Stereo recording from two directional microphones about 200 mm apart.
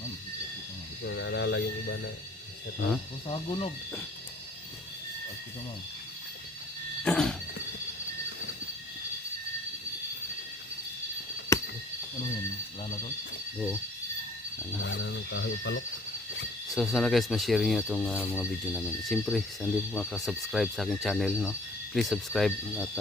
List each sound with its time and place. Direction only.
1.0 s speech: 65° left (ahead or behind)
3.2 s speech: 25° left (ahead or behind)
7.0 s a sound: 5° left (ahead or behind)
11.5 s a sound: 15° left (ahead or behind)
14.8 s speech: 70° left (ahead or behind)
16.7 s speech: centre (ahead or behind)